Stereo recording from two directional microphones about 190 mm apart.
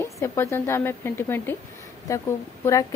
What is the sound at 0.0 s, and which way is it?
A woman's voice, 15° left (ahead or behind).